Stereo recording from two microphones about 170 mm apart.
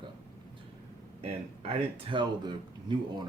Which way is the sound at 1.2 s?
30° right (ahead or behind).